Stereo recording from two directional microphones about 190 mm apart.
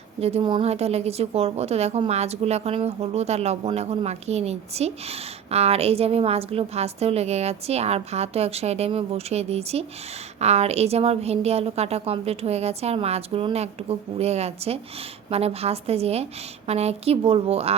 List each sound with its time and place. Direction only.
0.2 s a woman's voice: 30° right (ahead or behind)